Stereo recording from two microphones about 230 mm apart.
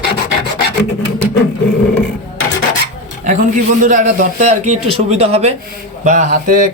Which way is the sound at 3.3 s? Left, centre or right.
Right.